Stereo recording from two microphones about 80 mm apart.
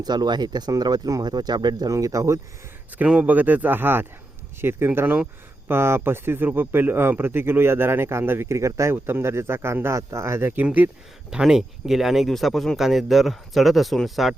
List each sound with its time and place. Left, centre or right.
0.0 s speech: right
1.9 s speech: right
3.0 s speech: centre; by 10.6 s right
11.3 s speech: centre